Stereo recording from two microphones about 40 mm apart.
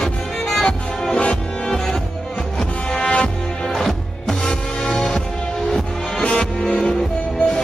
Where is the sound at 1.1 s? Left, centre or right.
Left.